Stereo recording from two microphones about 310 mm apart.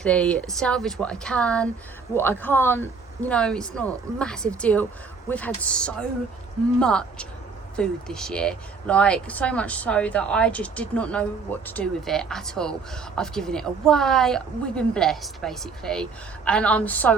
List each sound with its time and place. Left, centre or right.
0.0 s speech: centre